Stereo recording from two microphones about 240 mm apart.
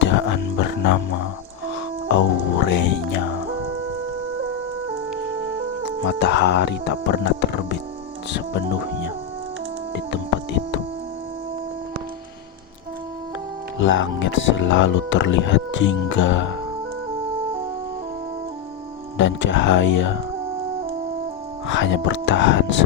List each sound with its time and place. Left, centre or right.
0.0 s music: left
2.1 s music: left
6.1 s speech: left
9.9 s music: left
13.7 s speech: left
19.1 s speech: left
21.7 s speech: left